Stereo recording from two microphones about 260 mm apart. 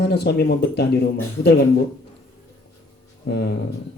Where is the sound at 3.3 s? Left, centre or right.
Left.